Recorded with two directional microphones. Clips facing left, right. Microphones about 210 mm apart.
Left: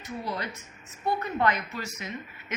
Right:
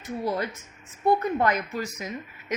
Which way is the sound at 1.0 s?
45° right (ahead or behind).